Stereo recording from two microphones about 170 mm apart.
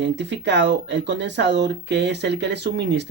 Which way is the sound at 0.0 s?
90° right.